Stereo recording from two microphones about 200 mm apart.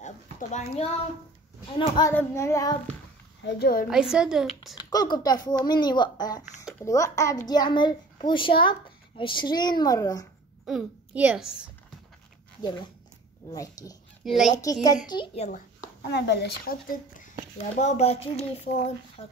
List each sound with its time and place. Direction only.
0.0 s a sound: 35° left (ahead or behind)
1.8 s a child's voice: 20° left (ahead or behind)
2.1 s child singing: 15° left (ahead or behind)
3.4 s a woman's voice: 50° left (ahead or behind)
3.9 s a woman's voice: 5° right (ahead or behind)
4.7 s a child's voice: 20° left (ahead or behind)
6.8 s child singing: 15° left (ahead or behind)
7.4 s a child's voice: 20° left (ahead or behind)
10.6 s a woman's voice: centre (ahead or behind)
13.5 s child singing: 20° left (ahead or behind)
14.2 s a woman's voice: centre (ahead or behind)
14.6 s a child's voice: 20° left (ahead or behind)
16.1 s speech: 55° left (ahead or behind)
17.7 s speech: 35° left (ahead or behind)